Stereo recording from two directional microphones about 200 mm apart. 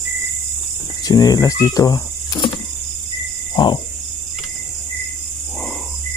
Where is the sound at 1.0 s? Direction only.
15° left (ahead or behind).